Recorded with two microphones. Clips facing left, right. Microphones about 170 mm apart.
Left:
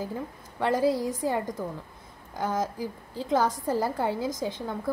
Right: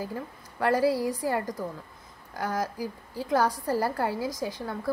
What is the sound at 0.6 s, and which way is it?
A woman's voice, 20° left (ahead or behind).